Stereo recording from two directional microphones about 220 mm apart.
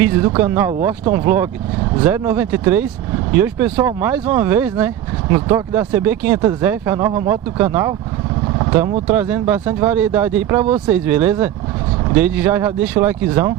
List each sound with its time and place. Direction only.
0.0 s speech: 10° right (ahead or behind)
8.5 s vehicle: 20° right (ahead or behind)
9.0 s speech: 10° right (ahead or behind)